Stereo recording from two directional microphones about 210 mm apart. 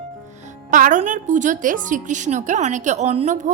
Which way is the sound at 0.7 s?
40° right (ahead or behind).